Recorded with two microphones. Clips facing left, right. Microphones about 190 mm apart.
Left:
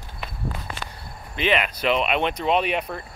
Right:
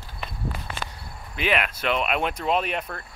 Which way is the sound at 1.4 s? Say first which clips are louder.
Left 2 dB; centre (ahead or behind).